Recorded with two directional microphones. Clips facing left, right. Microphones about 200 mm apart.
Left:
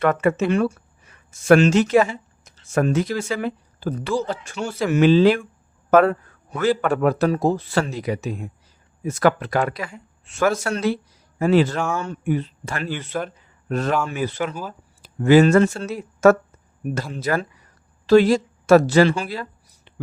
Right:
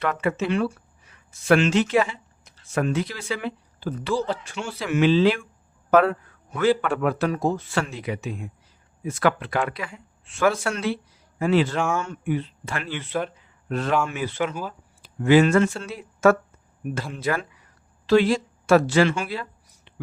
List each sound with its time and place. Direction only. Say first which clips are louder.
0.0 s speech: left 6 dB; 50° left (ahead or behind)